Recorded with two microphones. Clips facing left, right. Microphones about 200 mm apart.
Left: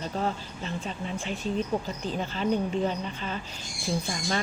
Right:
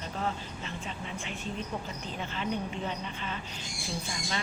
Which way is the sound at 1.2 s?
35° left (ahead or behind).